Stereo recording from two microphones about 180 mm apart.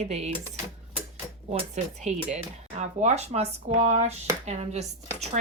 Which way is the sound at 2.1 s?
40° right (ahead or behind).